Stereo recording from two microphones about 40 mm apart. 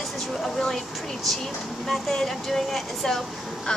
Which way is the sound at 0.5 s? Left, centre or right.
Centre.